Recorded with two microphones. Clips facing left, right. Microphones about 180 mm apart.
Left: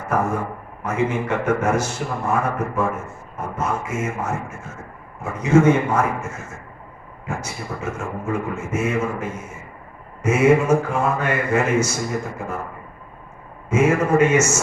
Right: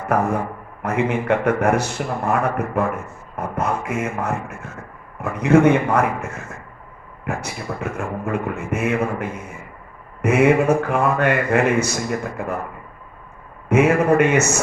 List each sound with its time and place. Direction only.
0.0 s a man's voice: 60° right (ahead or behind)
13.7 s a man's voice: 60° right (ahead or behind)